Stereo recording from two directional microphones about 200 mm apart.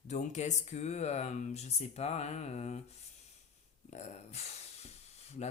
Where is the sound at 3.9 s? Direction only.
35° left (ahead or behind).